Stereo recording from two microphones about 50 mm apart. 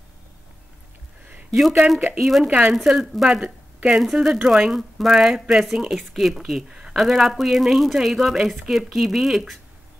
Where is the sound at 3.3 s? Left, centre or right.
Centre.